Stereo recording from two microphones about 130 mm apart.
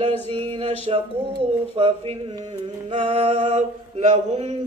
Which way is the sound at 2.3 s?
35° right (ahead or behind).